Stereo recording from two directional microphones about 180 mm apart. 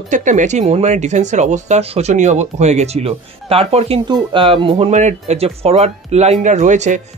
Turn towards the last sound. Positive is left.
turn(degrees=-40)  # may be behind; listen again after turning